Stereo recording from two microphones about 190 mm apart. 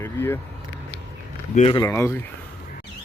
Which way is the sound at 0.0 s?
10° left (ahead or behind).